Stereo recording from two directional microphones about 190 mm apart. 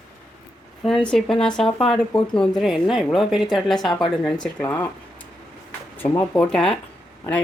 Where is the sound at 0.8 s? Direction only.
5° left (ahead or behind).